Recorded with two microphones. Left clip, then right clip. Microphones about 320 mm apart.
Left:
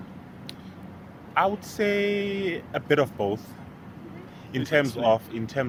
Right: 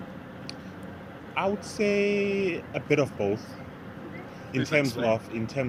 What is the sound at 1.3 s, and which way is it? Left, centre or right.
Speech, left.